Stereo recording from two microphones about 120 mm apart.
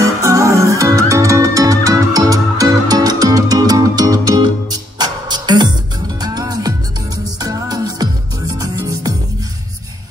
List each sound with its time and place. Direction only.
0.0 s music: 25° right (ahead or behind)